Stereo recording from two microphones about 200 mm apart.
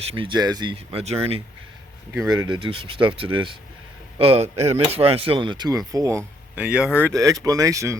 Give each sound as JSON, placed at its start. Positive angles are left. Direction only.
{"t": 0.1, "sound": "speech", "side_deg": -25}
{"t": 2.1, "sound": "speech", "side_deg": -15}
{"t": 7.0, "sound": "speech", "side_deg": -15}